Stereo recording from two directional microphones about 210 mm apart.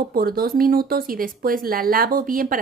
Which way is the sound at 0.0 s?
45° right (ahead or behind).